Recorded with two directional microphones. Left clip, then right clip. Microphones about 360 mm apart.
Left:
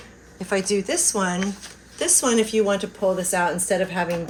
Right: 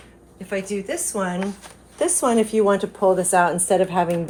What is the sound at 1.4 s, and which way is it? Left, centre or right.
Speech, centre.